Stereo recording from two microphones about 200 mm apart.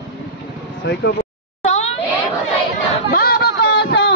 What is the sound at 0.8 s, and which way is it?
Speech, 60° left (ahead or behind).